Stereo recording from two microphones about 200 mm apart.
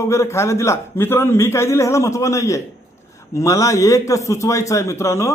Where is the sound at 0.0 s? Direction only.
15° left (ahead or behind).